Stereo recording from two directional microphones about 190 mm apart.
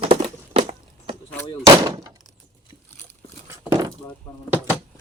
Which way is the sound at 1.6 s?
20° right (ahead or behind).